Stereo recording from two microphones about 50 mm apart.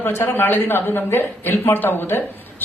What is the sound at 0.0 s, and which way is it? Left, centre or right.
A man's voice, left.